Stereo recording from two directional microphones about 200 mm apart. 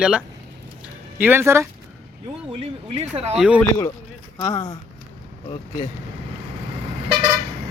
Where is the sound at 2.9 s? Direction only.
30° right (ahead or behind).